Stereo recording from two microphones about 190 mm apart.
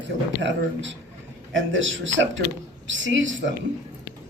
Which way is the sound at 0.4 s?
75° right (ahead or behind).